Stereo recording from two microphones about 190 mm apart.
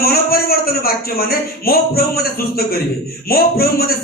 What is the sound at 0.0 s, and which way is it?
A man's voice, 55° left (ahead or behind).